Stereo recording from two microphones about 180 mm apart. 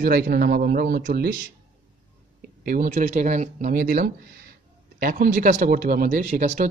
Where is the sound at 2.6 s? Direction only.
50° right (ahead or behind).